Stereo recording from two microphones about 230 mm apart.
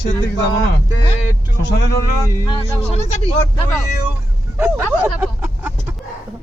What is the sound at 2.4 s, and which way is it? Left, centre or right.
Speech, left.